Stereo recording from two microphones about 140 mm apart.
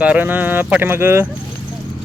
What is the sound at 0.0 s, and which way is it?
Speech, 10° right (ahead or behind).